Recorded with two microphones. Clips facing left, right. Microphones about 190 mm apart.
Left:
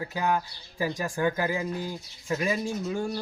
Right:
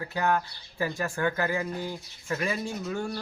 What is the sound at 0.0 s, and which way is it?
Speech, 10° left (ahead or behind).